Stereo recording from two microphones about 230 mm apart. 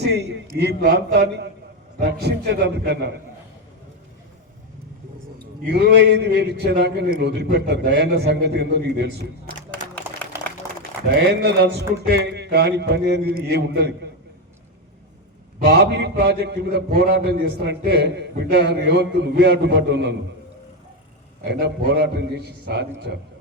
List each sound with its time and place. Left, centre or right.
0.0 s a man's voice: right
5.7 s a man's voice: right
11.1 s a man's voice: right
15.5 s a man's voice: right
21.6 s a man's voice: right